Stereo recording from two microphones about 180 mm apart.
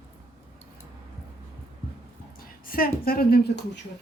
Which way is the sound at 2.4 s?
50° left (ahead or behind).